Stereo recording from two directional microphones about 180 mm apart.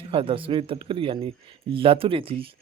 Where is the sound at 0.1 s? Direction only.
30° right (ahead or behind).